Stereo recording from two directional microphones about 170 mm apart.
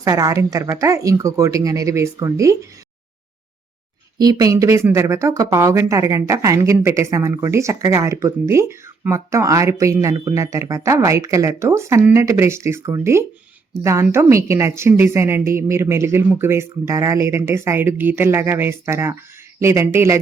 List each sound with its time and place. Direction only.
0.0 s speech: 20° right (ahead or behind)
4.2 s speech: 20° right (ahead or behind)